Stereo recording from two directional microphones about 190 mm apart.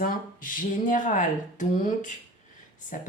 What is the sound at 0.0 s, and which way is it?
Speech, 45° left (ahead or behind).